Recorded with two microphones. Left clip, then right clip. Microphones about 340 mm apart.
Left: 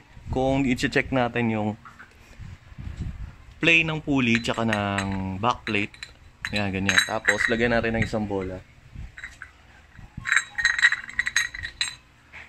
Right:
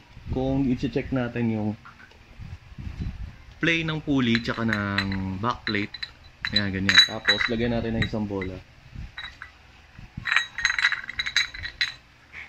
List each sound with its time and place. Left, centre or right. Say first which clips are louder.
0.3 s speech: left 3 dB; left
3.6 s speech: left 5 dB; centre
7.2 s speech: left 1 dB; left
7.5 s creak: left 5 dB; left
8.1 s speech: left 3 dB; left
9.4 s a sound: even; centre